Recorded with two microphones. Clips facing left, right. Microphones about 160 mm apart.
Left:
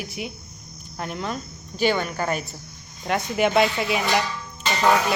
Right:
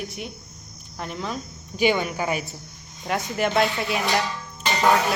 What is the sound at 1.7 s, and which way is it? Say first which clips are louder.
Speech: right 1 dB; 15° right (ahead or behind).